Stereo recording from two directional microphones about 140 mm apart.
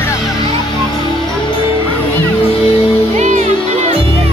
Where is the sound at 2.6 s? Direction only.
45° left (ahead or behind).